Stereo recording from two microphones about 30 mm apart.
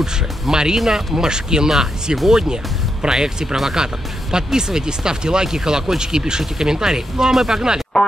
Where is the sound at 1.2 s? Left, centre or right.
Right.